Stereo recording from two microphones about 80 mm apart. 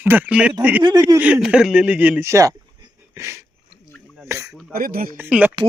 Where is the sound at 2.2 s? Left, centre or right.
Right.